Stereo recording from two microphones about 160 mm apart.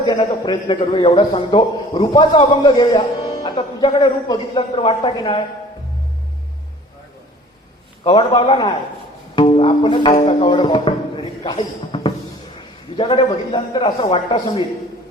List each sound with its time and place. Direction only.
0.0 s a man's voice: 30° left (ahead or behind)
8.0 s a man's voice: 30° left (ahead or behind)